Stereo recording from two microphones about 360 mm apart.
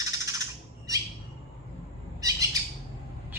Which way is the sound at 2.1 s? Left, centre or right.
Centre.